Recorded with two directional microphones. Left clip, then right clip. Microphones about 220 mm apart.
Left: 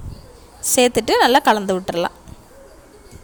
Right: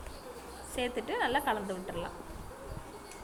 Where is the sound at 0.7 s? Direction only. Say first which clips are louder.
Left 19 dB; 55° left (ahead or behind).